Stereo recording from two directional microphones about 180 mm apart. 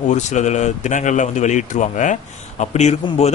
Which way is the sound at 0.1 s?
40° left (ahead or behind).